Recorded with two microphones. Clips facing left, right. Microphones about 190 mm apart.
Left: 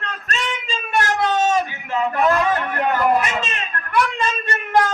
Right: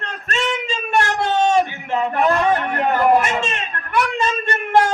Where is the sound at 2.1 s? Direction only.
25° right (ahead or behind).